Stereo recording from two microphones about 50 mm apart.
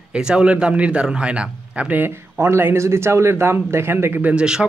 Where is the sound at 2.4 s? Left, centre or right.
Right.